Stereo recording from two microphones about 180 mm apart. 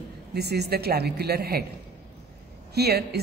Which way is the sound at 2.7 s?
60° right (ahead or behind).